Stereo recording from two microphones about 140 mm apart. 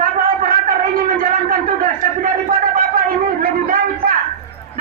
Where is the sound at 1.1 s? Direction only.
90° right.